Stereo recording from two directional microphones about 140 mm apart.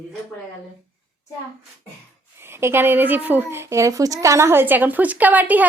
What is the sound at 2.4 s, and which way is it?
A woman's voice, 15° right (ahead or behind).